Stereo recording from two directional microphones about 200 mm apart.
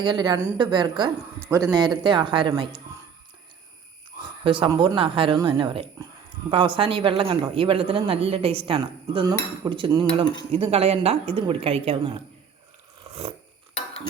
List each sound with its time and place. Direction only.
0.0 s a man's voice: 25° right (ahead or behind)
4.2 s a man's voice: 25° right (ahead or behind)